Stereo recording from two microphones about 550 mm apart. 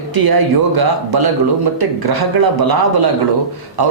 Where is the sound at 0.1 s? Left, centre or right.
Right.